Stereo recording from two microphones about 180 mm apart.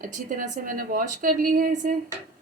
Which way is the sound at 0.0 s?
45° right (ahead or behind).